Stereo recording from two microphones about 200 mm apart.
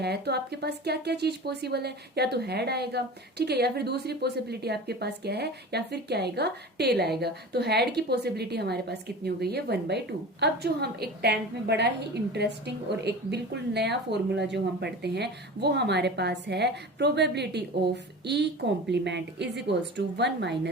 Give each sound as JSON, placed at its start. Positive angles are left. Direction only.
{"t": 0.0, "sound": "speech", "side_deg": -55}